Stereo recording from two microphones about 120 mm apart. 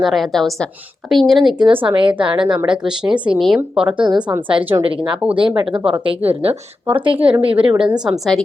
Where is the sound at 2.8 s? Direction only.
5° right (ahead or behind).